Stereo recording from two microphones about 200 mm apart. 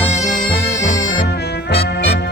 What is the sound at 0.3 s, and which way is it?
Music, 40° left (ahead or behind).